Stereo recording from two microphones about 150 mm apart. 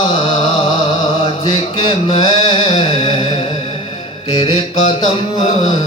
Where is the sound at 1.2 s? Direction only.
30° left (ahead or behind).